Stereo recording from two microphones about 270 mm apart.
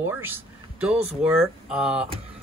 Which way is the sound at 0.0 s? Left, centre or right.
Centre.